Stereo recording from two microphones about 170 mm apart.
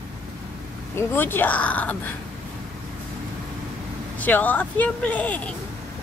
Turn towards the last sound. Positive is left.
turn(degrees=10)  # may be behind; listen again after turning